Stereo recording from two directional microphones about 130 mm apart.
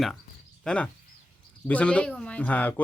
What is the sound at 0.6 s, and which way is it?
Speech, 10° left (ahead or behind).